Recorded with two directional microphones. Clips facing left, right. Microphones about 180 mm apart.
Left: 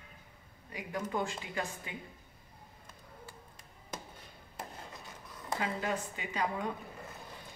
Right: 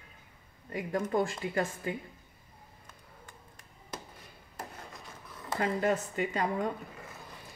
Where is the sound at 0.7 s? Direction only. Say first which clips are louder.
Right 6 dB; 50° right (ahead or behind).